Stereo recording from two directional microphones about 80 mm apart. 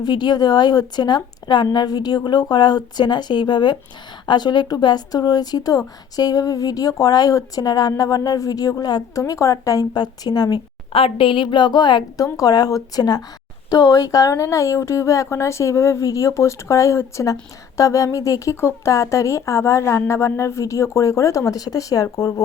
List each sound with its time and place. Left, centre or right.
0.0 s a woman's voice: left
9.9 s a woman's voice: left
11.2 s speech: left
12.1 s speech: left